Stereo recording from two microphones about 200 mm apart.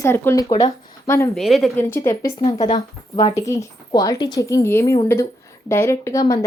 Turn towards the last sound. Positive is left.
turn(degrees=15)  # may be behind; listen again after turning